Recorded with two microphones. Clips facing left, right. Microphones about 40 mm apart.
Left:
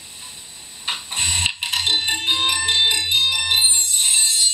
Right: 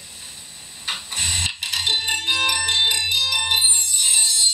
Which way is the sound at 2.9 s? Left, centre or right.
Left.